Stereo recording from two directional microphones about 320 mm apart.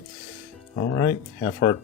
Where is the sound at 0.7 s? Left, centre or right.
Left.